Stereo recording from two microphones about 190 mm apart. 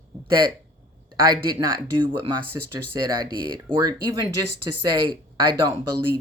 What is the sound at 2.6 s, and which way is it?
Speech, 20° right (ahead or behind).